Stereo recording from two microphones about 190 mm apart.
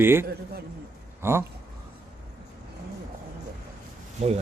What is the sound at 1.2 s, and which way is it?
Speech, 10° right (ahead or behind).